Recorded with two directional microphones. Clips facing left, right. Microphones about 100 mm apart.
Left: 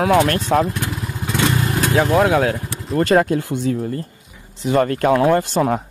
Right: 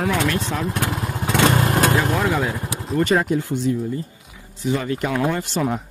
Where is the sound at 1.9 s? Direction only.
55° left (ahead or behind).